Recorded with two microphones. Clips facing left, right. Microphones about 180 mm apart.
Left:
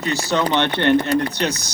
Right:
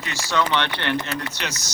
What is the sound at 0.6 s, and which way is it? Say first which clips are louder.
Speech: left 9 dB; 50° left (ahead or behind).